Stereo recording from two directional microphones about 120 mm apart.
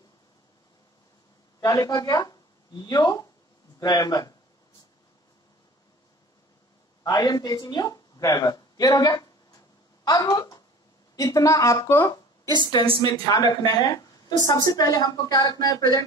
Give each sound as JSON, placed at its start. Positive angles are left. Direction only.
{"t": 1.6, "sound": "a woman's voice", "side_deg": 35}
{"t": 7.0, "sound": "a woman's voice", "side_deg": 30}
{"t": 13.0, "sound": "a woman's voice", "side_deg": 30}